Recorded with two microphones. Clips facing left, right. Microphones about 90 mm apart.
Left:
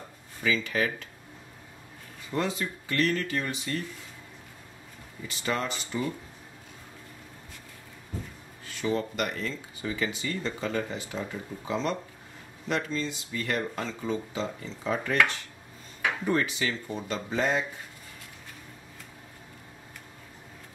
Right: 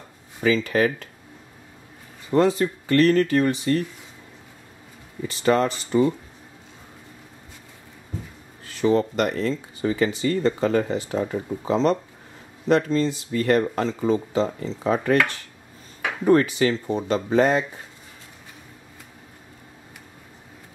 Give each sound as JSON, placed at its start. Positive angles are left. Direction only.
{"t": 0.4, "sound": "speech", "side_deg": -45}
{"t": 2.3, "sound": "speech", "side_deg": -40}
{"t": 5.4, "sound": "speech", "side_deg": -45}
{"t": 8.8, "sound": "speech", "side_deg": -35}
{"t": 16.3, "sound": "speech", "side_deg": -45}